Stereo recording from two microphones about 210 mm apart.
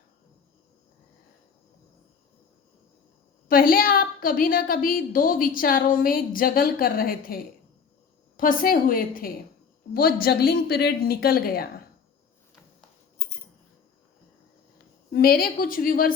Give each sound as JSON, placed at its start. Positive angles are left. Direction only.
{"t": 3.5, "sound": "a woman's voice", "side_deg": 40}
{"t": 15.1, "sound": "a woman's voice", "side_deg": 45}